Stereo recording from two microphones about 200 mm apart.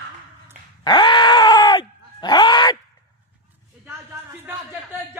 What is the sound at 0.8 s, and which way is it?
Groan, 25° left (ahead or behind).